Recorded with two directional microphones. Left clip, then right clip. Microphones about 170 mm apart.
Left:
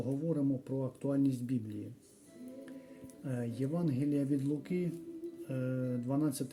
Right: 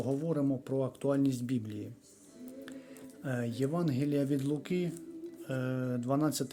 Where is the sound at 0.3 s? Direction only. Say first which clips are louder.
Right 2 dB; 10° left (ahead or behind).